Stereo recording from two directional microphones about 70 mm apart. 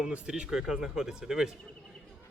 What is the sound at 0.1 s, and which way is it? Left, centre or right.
Speech, centre.